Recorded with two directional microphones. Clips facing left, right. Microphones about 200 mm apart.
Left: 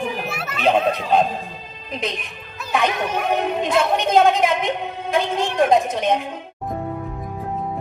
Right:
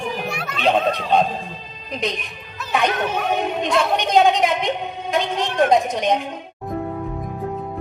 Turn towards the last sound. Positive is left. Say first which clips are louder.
# even
turn(degrees=5)  # may be behind; listen again after turning